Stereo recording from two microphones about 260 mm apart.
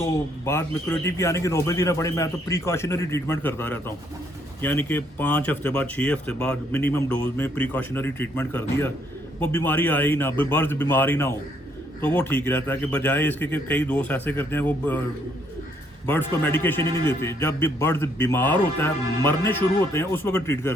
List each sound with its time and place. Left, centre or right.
0.4 s speech: centre
16.0 s speech: centre